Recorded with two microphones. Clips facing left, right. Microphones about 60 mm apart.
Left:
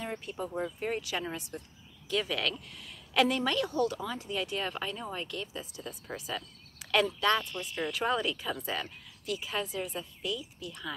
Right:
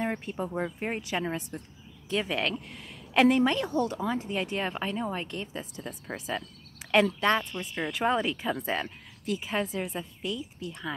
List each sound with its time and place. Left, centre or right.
0.0 s a woman's voice: right
6.8 s a sound: right
7.2 s a woman's voice: right